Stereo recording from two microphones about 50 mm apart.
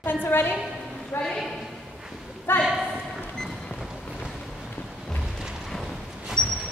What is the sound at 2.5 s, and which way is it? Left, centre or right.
Speech, left.